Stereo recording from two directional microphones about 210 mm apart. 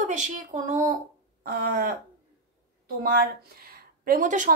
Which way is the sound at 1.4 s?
45° right (ahead or behind).